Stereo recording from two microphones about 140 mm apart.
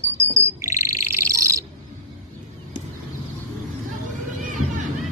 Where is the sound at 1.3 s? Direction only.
20° right (ahead or behind).